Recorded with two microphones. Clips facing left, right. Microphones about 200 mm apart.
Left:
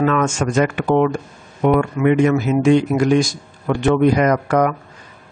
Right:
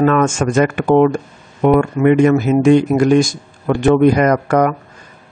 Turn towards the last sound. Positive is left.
turn(degrees=-45)  # may be behind; listen again after turning